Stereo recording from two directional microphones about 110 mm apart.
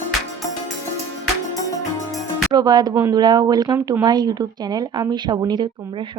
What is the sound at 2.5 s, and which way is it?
A woman's voice, 40° right (ahead or behind).